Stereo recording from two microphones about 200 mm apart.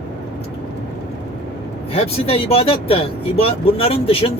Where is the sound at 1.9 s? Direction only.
30° left (ahead or behind).